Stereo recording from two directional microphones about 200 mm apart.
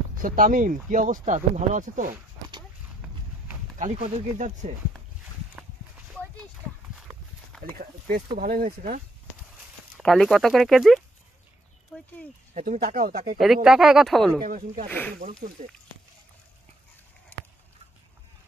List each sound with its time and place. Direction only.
0.2 s speech: 40° right (ahead or behind)
3.7 s speech: 35° right (ahead or behind)
7.0 s horse: centre (ahead or behind)
7.6 s speech: 45° right (ahead or behind)
9.9 s speech: centre (ahead or behind)
11.9 s a sound: 5° left (ahead or behind)
12.5 s speech: 40° right (ahead or behind)
13.4 s speech: centre (ahead or behind)
14.4 s speech: 40° right (ahead or behind)
14.9 s speech: 10° left (ahead or behind)
17.3 s a sound: 10° left (ahead or behind)